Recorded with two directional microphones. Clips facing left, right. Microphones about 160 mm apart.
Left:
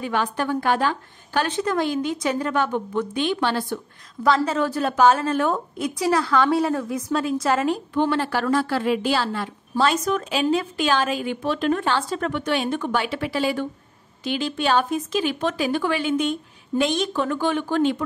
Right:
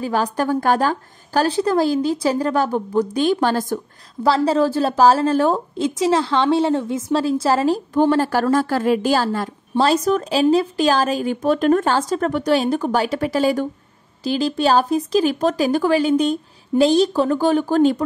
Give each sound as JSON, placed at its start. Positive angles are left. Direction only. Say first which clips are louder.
{"t": 0.0, "sound": "a woman's voice", "louder": "right 4 dB", "side_deg": -40}
{"t": 4.2, "sound": "a woman's voice", "louder": "right 4 dB", "side_deg": -30}